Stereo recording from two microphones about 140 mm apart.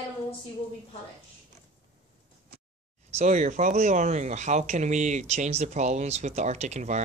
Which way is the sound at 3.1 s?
60° right (ahead or behind).